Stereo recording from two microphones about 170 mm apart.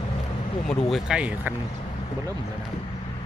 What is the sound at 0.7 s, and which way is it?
Speech, centre (ahead or behind).